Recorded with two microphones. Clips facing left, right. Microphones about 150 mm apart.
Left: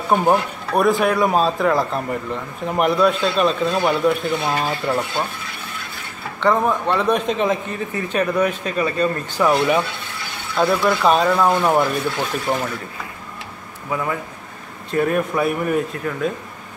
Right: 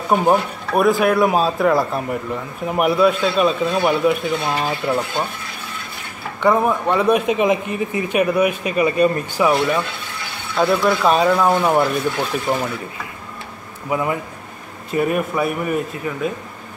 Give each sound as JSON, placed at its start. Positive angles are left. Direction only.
{"t": 0.2, "sound": "speech", "side_deg": -5}
{"t": 6.4, "sound": "a man's voice", "side_deg": -10}
{"t": 10.5, "sound": "speech", "side_deg": 0}
{"t": 13.8, "sound": "a man's voice", "side_deg": -15}